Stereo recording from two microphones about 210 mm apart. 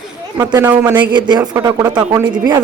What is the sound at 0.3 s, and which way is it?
Speech, 10° right (ahead or behind).